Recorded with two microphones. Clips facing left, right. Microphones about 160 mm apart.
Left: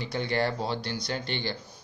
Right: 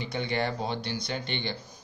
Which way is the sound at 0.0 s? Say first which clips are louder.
Left 2 dB; 20° right (ahead or behind).